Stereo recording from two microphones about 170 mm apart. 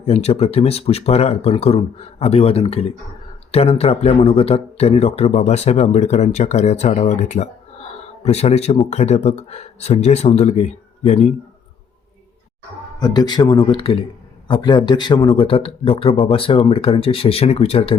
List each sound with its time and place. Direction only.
0.0 s speech: 40° left (ahead or behind)
13.0 s speech: 25° left (ahead or behind)